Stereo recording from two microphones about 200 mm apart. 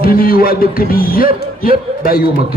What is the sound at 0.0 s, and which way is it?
Speech, 45° left (ahead or behind).